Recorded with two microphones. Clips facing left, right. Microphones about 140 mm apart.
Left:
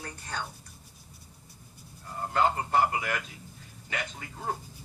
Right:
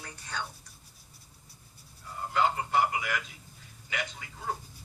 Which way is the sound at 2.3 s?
45° left (ahead or behind).